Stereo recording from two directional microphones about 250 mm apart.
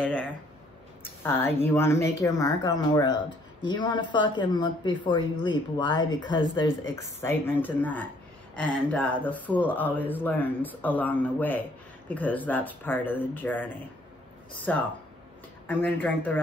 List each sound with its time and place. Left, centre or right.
0.0 s a sound: centre
1.6 s speech: centre
14.7 s speech: centre